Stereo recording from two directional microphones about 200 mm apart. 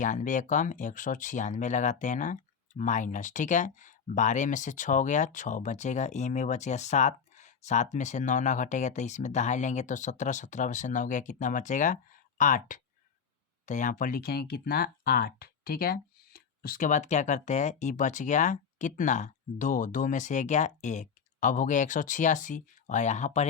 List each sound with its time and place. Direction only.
0.0 s speech: 40° left (ahead or behind)